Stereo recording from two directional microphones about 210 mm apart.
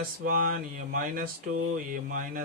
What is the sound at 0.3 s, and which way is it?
Speech, 40° right (ahead or behind).